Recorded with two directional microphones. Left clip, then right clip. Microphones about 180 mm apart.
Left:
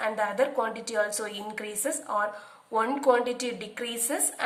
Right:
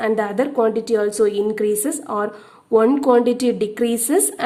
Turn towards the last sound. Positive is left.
turn(degrees=-40)  # may be behind; listen again after turning